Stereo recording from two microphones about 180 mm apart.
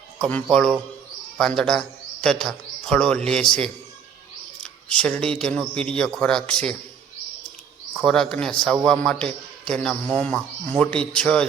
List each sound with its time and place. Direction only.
0.2 s a man's voice: 10° left (ahead or behind)
4.6 s a man's voice: 5° left (ahead or behind)
8.0 s a man's voice: 5° left (ahead or behind)